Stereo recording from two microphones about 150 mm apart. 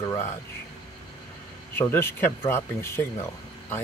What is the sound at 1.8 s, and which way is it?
Speech, 15° left (ahead or behind).